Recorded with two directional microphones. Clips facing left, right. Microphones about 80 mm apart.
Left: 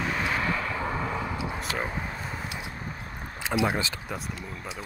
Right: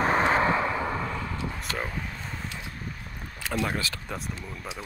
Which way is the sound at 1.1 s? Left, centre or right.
Centre.